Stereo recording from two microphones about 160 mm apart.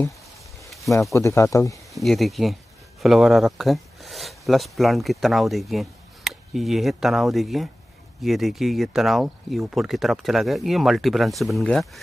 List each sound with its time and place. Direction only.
1.1 s speech: 20° left (ahead or behind)
2.0 s speech: centre (ahead or behind)